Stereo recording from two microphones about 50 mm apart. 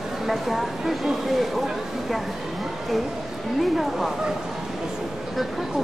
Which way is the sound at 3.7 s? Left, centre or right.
Centre.